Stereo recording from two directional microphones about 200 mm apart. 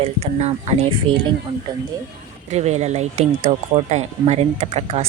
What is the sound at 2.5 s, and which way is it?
Speech, 35° right (ahead or behind).